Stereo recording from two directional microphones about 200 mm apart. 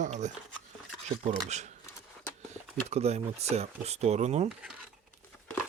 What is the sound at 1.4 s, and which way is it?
Speech, 35° right (ahead or behind).